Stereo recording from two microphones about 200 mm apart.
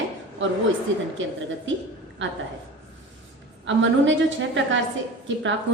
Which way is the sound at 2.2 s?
70° right (ahead or behind).